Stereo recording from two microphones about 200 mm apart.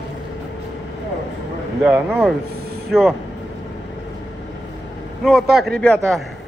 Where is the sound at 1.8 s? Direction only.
5° right (ahead or behind).